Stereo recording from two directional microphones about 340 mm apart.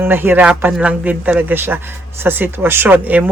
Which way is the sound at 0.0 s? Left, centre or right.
Centre.